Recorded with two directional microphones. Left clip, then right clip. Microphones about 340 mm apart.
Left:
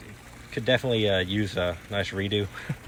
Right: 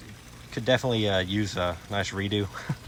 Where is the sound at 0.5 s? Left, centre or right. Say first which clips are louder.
Left 1 dB; right.